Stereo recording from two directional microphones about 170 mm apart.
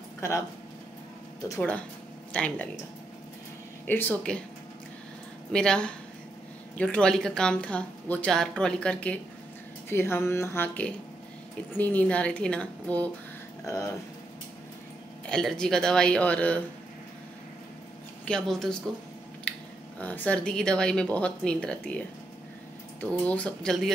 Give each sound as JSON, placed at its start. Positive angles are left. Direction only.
{"t": 1.6, "sound": "a woman's voice", "side_deg": 10}
{"t": 3.8, "sound": "a woman's voice", "side_deg": 10}
{"t": 5.5, "sound": "a woman's voice", "side_deg": 5}
{"t": 15.2, "sound": "speech", "side_deg": 5}
{"t": 18.2, "sound": "speech", "side_deg": 5}
{"t": 19.5, "sound": "a sound", "side_deg": 5}
{"t": 20.0, "sound": "a woman's voice", "side_deg": 10}